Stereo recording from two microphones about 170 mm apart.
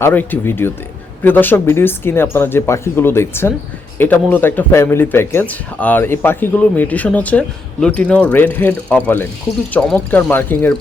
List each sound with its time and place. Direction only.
0.0 s speech: 10° left (ahead or behind)